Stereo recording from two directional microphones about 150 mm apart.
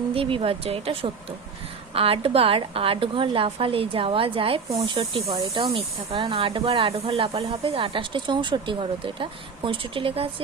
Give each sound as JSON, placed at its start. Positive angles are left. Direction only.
{"t": 0.1, "sound": "speech", "side_deg": -40}